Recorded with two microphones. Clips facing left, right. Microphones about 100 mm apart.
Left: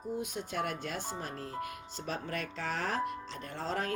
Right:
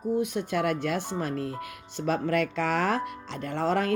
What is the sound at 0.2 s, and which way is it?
Speech, 85° right.